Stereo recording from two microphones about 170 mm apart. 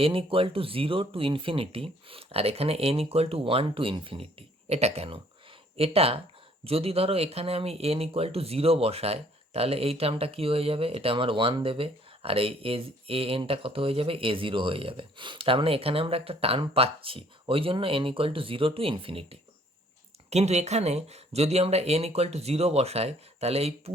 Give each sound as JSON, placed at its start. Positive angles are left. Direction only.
{"t": 0.0, "sound": "speech", "side_deg": -35}